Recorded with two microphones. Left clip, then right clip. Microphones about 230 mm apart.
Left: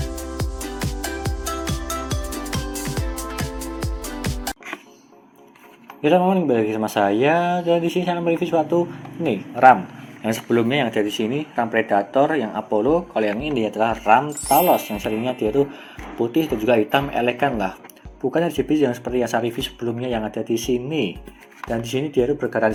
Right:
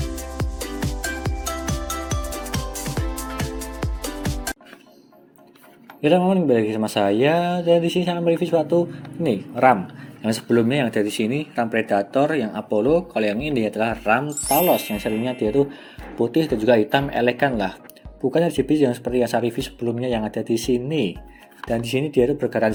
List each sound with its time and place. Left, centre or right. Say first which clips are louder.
0.4 s music: right 2 dB; centre
6.0 s speech: left 1 dB; right
14.3 s speech: left 3 dB; centre
14.8 s speech: left 1 dB; right